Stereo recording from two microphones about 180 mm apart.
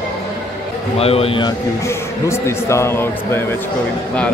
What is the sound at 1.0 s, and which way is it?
Speech, 35° left (ahead or behind).